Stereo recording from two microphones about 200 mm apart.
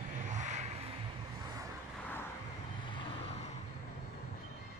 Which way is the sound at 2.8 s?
25° left (ahead or behind).